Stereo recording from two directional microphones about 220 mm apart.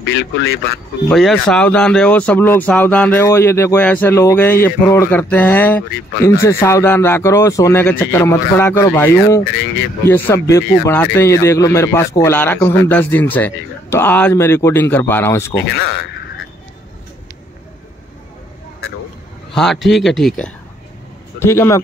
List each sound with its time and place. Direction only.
0.1 s speech: 50° left (ahead or behind)
1.0 s speech: centre (ahead or behind)
15.5 s speech: 50° left (ahead or behind)
19.5 s speech: centre (ahead or behind)